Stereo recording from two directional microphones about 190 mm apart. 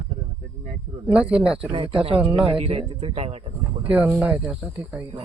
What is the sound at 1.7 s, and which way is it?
Speech, 25° right (ahead or behind).